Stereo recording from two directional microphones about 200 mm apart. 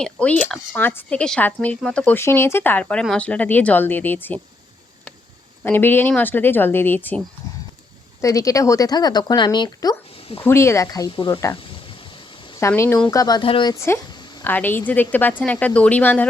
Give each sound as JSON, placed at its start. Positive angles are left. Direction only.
{"t": 0.0, "sound": "speech", "side_deg": 5}
{"t": 5.6, "sound": "speech", "side_deg": 10}
{"t": 8.2, "sound": "speech", "side_deg": 15}
{"t": 10.4, "sound": "speech", "side_deg": 15}
{"t": 11.6, "sound": "a sound", "side_deg": 25}
{"t": 12.5, "sound": "speech", "side_deg": 15}
{"t": 14.4, "sound": "speech", "side_deg": 10}